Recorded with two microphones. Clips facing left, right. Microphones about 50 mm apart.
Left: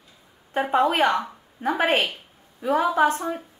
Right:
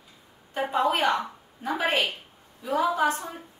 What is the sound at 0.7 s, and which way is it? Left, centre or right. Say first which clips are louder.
A woman's voice: left 4 dB; left.